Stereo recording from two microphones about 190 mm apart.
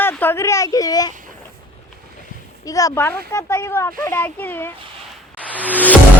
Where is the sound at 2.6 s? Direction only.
20° left (ahead or behind).